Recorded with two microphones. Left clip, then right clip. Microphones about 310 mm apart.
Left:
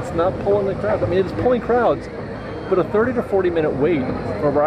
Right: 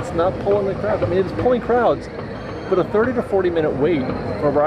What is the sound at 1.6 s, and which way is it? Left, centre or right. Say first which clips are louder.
Speech: even; centre.